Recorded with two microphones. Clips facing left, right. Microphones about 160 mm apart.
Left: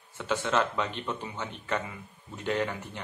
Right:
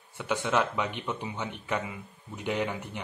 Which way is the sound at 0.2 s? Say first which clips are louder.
Even; 15° right (ahead or behind).